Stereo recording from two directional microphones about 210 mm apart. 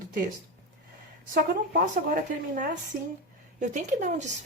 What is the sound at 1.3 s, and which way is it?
Speech, 40° right (ahead or behind).